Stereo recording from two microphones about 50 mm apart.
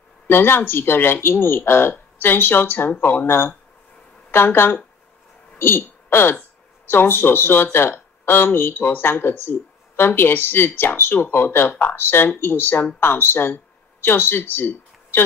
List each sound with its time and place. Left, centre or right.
0.3 s speech: left